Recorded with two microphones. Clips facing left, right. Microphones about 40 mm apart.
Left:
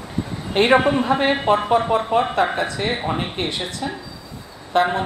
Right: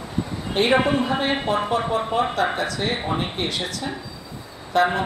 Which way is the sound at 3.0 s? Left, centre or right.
Centre.